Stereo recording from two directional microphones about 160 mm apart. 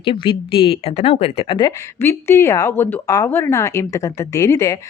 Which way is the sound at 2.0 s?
15° left (ahead or behind).